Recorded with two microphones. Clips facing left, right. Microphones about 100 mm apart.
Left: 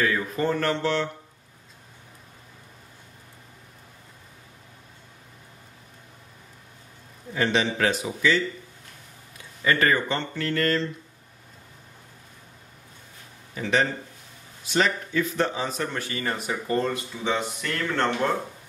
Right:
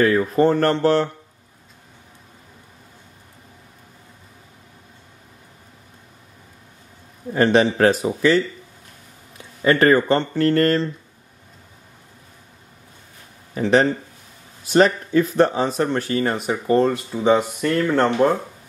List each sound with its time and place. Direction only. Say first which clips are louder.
0.0 s speech: right 9 dB; 35° right (ahead or behind)
7.3 s speech: right 8 dB; 40° right (ahead or behind)
9.6 s speech: right 7 dB; 35° right (ahead or behind)
13.6 s speech: right 7 dB; 40° right (ahead or behind)
16.3 s speech: right 4 dB; 25° right (ahead or behind)
17.6 s speech: right 8 dB; 10° right (ahead or behind)